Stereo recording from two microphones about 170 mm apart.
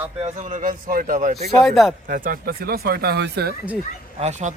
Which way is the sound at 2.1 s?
60° right (ahead or behind).